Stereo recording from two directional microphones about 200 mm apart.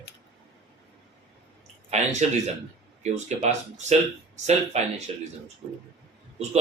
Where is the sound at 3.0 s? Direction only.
35° right (ahead or behind).